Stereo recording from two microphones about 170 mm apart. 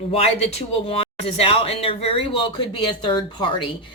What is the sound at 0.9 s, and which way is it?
Speech, 35° left (ahead or behind).